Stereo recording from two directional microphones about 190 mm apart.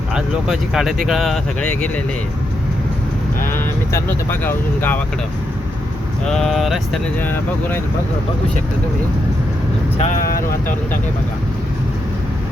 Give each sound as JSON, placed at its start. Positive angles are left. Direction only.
{"t": 0.1, "sound": "speech", "side_deg": -5}
{"t": 3.5, "sound": "speech", "side_deg": 10}
{"t": 6.2, "sound": "speech", "side_deg": 0}
{"t": 7.2, "sound": "speech", "side_deg": 10}
{"t": 10.0, "sound": "speech", "side_deg": 45}